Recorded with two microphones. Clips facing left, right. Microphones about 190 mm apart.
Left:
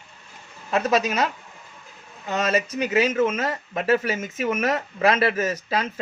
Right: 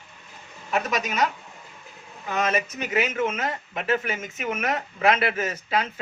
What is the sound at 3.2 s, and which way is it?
Speech, 40° left (ahead or behind).